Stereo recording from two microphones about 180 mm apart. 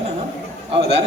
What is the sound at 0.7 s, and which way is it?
Speech, 35° right (ahead or behind).